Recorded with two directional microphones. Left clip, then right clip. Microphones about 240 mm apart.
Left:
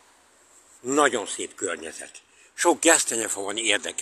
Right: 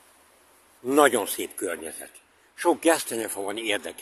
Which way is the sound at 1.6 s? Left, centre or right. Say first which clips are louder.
Left 1 dB; centre.